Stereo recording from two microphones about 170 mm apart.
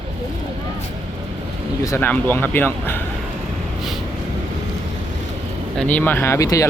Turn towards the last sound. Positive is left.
turn(degrees=20)  # may be behind; listen again after turning